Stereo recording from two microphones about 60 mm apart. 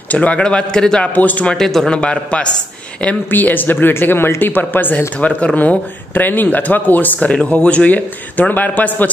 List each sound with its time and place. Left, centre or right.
0.1 s a man's voice: left
1.1 s speech: left
1.6 s speech: centre
1.9 s a man's voice: centre
3.3 s speech: left